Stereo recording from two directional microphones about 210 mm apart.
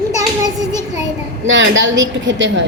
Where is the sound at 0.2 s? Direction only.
20° right (ahead or behind).